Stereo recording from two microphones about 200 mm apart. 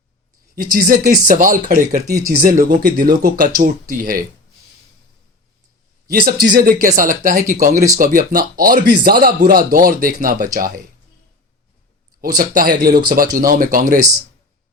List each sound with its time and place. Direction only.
0.5 s speech: 50° right (ahead or behind)
6.1 s speech: 50° right (ahead or behind)
12.4 s speech: 45° right (ahead or behind)